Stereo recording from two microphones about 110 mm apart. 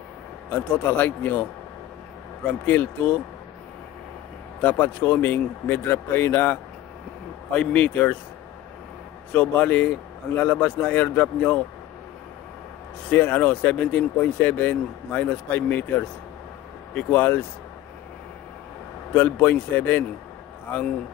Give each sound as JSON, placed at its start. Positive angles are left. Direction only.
{"t": 0.5, "sound": "speech", "side_deg": 15}
{"t": 4.6, "sound": "speech", "side_deg": 15}
{"t": 9.3, "sound": "speech", "side_deg": 15}
{"t": 13.1, "sound": "speech", "side_deg": 15}
{"t": 19.1, "sound": "speech", "side_deg": 15}